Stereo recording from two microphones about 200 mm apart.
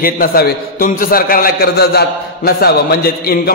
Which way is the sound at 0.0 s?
45° left (ahead or behind).